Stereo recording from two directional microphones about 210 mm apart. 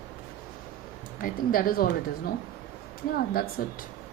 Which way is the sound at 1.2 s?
45° left (ahead or behind).